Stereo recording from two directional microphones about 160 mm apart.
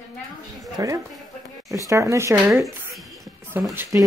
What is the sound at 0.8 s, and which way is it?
Speech, 20° right (ahead or behind).